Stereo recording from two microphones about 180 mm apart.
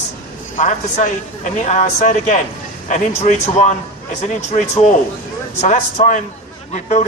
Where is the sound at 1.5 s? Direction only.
40° left (ahead or behind).